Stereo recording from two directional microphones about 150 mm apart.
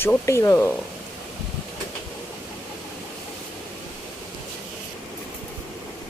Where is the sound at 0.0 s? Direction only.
15° left (ahead or behind).